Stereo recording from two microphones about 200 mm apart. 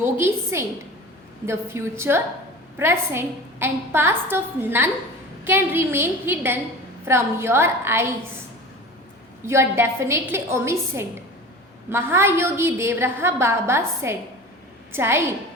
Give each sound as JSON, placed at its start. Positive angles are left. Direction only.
{"t": 0.0, "sound": "a woman's voice", "side_deg": -10}
{"t": 9.5, "sound": "a woman's voice", "side_deg": -15}